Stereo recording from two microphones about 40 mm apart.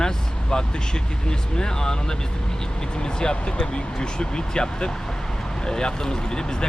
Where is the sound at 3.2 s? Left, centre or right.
Centre.